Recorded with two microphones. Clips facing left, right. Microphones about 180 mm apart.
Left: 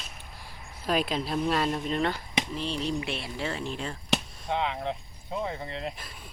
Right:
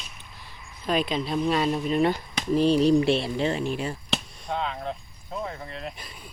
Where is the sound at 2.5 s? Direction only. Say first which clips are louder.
Right 15 dB; 40° right (ahead or behind); by 4.0 s 10° right (ahead or behind).